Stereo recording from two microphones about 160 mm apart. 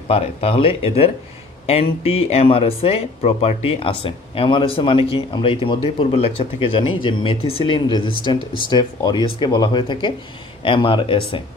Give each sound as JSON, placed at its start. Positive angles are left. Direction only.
{"t": 0.1, "sound": "speech", "side_deg": 40}